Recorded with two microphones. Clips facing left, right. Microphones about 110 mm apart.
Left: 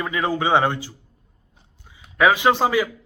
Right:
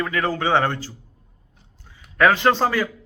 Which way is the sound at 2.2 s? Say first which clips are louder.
Even; 10° left (ahead or behind).